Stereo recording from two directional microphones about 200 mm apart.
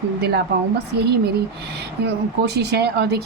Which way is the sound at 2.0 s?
55° right (ahead or behind).